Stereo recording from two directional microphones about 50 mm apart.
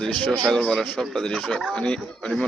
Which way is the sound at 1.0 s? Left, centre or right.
Centre.